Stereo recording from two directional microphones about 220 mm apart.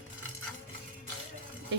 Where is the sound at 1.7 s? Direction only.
55° right (ahead or behind).